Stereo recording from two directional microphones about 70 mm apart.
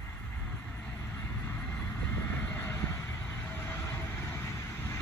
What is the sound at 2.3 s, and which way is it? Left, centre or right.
Vehicle, left.